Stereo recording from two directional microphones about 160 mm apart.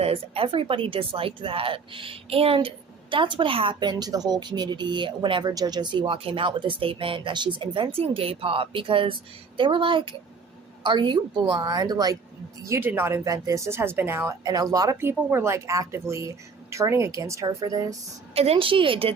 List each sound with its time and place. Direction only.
0.0 s a woman's voice: 35° right (ahead or behind)
18.3 s speech: 35° right (ahead or behind)